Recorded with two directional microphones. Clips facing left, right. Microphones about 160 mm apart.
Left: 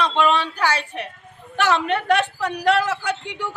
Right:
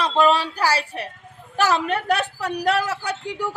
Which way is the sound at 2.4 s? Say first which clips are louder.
Left 2 dB; 10° right (ahead or behind).